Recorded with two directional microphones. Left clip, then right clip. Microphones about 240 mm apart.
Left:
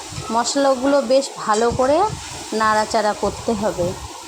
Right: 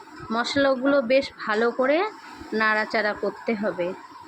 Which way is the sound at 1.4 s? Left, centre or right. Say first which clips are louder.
Left 5 dB; centre.